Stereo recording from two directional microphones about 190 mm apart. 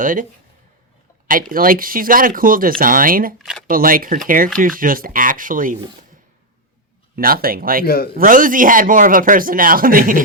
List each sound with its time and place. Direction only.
0.0 s speech: 45° right (ahead or behind)
1.3 s speech: 50° right (ahead or behind)
3.3 s speech: centre (ahead or behind)
3.7 s speech: 50° right (ahead or behind)
7.2 s speech: 50° right (ahead or behind)
7.9 s speech: 50° left (ahead or behind)
8.1 s speech: 45° right (ahead or behind)